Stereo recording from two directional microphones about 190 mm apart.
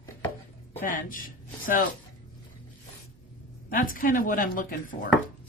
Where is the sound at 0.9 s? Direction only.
45° left (ahead or behind).